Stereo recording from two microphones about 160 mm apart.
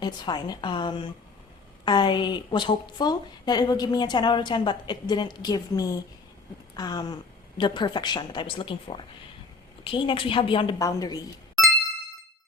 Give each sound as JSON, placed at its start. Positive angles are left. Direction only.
{"t": 0.0, "sound": "a woman's voice", "side_deg": 25}